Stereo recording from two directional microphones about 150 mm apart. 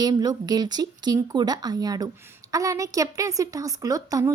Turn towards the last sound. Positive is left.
turn(degrees=-25)  # may be behind; listen again after turning